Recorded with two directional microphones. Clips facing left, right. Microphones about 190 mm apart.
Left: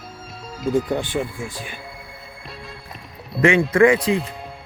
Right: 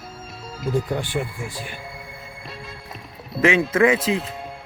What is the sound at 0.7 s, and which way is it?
Speech, 20° left (ahead or behind).